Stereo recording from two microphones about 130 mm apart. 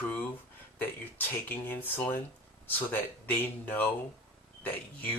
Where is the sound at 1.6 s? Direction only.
15° left (ahead or behind).